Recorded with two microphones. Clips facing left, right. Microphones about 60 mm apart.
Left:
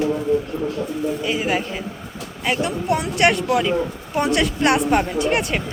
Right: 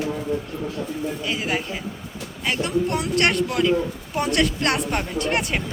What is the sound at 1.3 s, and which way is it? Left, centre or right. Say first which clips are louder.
A woman's voice: left 2 dB; centre.